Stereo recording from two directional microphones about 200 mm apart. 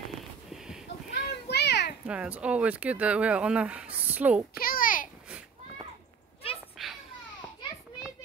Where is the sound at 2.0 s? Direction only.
5° right (ahead or behind).